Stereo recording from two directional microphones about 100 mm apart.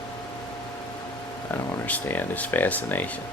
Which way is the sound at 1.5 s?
20° left (ahead or behind).